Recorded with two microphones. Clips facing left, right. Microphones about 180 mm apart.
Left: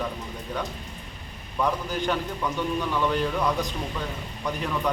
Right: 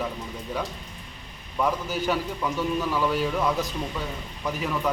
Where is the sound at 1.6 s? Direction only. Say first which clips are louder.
Even; 5° right (ahead or behind).